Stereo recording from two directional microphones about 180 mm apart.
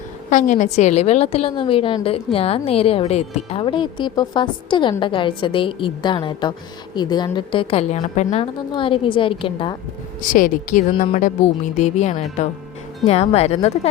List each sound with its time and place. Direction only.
0.3 s a woman's voice: 40° left (ahead or behind)
8.5 s a woman's voice: 25° left (ahead or behind)
10.2 s speech: 45° left (ahead or behind)
11.8 s a woman's voice: 40° left (ahead or behind)